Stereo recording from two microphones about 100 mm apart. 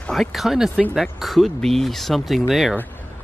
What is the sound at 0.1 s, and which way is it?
Speech, centre (ahead or behind).